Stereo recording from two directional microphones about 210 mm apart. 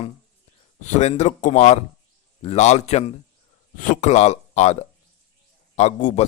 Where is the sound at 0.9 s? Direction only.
30° left (ahead or behind).